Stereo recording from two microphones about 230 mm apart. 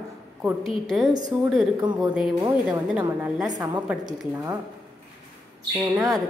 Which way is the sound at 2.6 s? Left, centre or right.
Centre.